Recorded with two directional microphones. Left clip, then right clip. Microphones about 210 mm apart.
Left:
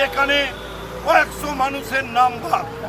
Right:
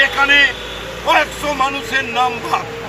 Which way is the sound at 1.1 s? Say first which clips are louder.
Right 2 dB; 20° left (ahead or behind).